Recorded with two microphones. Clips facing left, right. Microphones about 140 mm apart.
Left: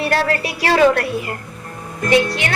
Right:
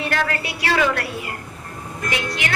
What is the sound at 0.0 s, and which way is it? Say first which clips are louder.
A woman's voice: left 5 dB; 35° left (ahead or behind).